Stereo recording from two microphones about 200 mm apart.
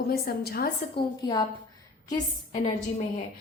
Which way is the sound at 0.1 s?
50° left (ahead or behind).